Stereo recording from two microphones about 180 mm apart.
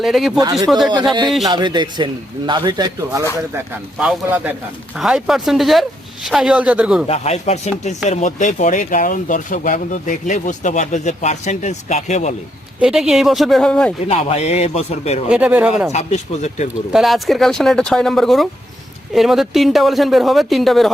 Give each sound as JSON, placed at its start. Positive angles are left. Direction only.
{"t": 0.0, "sound": "speech", "side_deg": 0}
{"t": 1.5, "sound": "speech", "side_deg": -25}
{"t": 3.9, "sound": "speech", "side_deg": -5}
{"t": 7.1, "sound": "speech", "side_deg": 35}
{"t": 12.8, "sound": "speech", "side_deg": -5}
{"t": 14.1, "sound": "speech", "side_deg": 35}
{"t": 15.3, "sound": "speech", "side_deg": -5}
{"t": 15.9, "sound": "speech", "side_deg": 40}
{"t": 16.9, "sound": "speech", "side_deg": 0}